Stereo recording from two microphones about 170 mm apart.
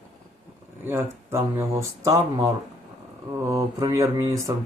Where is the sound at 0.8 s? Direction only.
15° right (ahead or behind).